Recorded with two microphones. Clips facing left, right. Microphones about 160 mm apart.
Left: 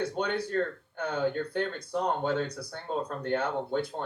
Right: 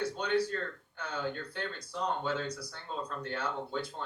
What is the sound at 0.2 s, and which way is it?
Speech, 55° left (ahead or behind).